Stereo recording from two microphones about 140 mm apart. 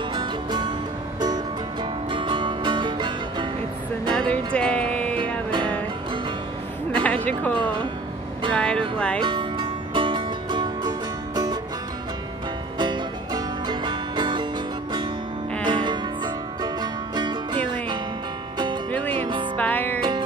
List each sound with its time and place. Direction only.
0.1 s music: 30° right (ahead or behind)
4.1 s music: 5° left (ahead or behind)
7.0 s a woman's voice: 10° left (ahead or behind)
9.2 s music: 35° right (ahead or behind)
12.7 s music: 35° right (ahead or behind)
15.6 s music: 35° right (ahead or behind)
18.9 s music: 10° left (ahead or behind)
19.1 s music: 35° right (ahead or behind)
19.5 s music: 10° left (ahead or behind)
20.0 s music: 35° right (ahead or behind)